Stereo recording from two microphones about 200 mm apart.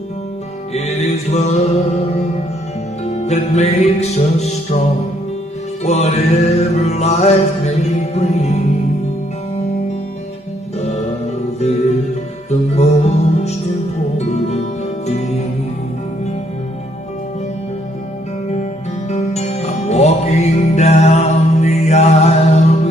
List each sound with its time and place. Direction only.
0.7 s music: 35° left (ahead or behind)
3.0 s music: 35° left (ahead or behind)
5.8 s music: 35° left (ahead or behind)
12.5 s music: 35° left (ahead or behind)
19.1 s music: 35° left (ahead or behind)